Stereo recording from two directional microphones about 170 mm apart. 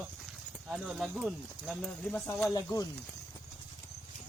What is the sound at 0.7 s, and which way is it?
Speech, 5° right (ahead or behind).